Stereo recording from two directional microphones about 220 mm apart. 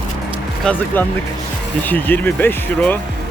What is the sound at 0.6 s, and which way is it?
Speech, 5° left (ahead or behind).